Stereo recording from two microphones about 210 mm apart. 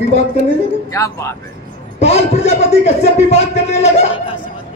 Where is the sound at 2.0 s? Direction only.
30° left (ahead or behind).